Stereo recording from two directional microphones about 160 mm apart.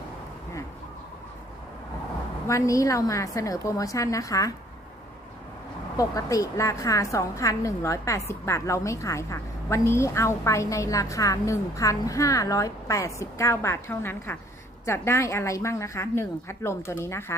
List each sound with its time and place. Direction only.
2.5 s a woman's voice: 20° left (ahead or behind)
6.0 s a woman's voice: 20° left (ahead or behind)